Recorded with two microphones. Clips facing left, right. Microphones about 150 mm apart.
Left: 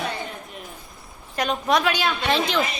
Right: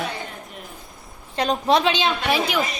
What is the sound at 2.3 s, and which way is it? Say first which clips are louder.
Speech: left 1 dB; 10° right (ahead or behind).